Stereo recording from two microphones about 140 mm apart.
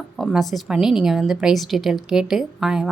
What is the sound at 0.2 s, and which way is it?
Speech, centre (ahead or behind).